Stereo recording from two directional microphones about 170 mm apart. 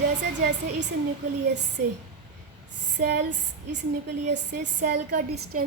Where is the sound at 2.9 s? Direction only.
70° right (ahead or behind).